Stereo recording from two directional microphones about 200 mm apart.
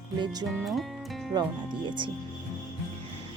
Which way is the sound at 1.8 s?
25° right (ahead or behind).